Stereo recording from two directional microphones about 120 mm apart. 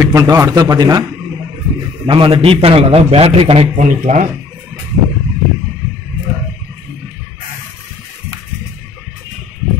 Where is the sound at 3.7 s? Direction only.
90° right.